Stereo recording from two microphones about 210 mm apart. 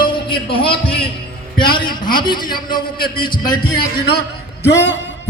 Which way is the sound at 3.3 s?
40° left (ahead or behind).